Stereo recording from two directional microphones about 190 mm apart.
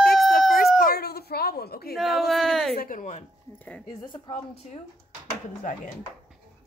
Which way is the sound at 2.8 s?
40° left (ahead or behind).